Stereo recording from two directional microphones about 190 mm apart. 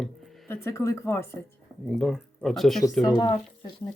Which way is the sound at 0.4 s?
15° left (ahead or behind).